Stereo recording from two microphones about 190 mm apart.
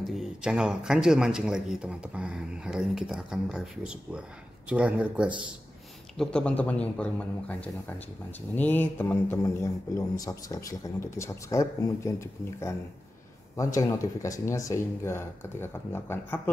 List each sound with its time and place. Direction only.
0.1 s a man's voice: 5° right (ahead or behind)
6.1 s speech: 5° left (ahead or behind)